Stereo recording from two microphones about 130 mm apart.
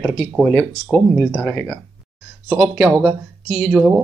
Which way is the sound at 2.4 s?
5° right (ahead or behind).